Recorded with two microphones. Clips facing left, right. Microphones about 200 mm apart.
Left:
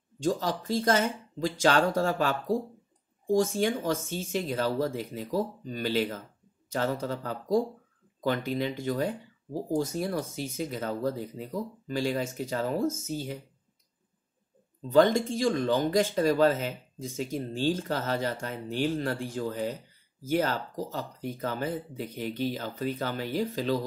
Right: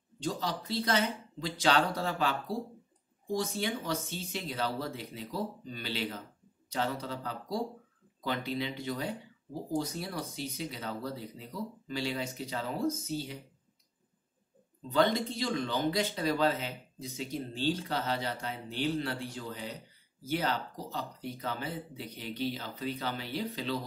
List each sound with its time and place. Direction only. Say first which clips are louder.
0.2 s speech: left 6 dB; 45° left (ahead or behind)
14.9 s speech: left 6 dB; 45° left (ahead or behind)